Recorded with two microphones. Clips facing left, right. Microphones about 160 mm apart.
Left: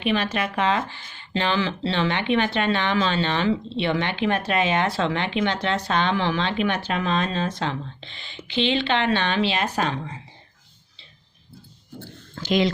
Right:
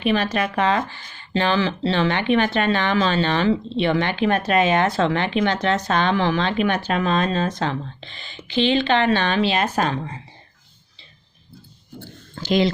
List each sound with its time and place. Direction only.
0.0 s speech: 40° right (ahead or behind)
12.3 s speech: 30° right (ahead or behind)